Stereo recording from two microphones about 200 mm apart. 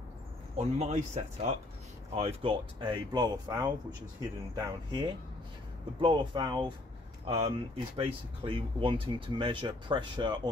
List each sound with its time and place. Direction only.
0.6 s speech: 35° right (ahead or behind)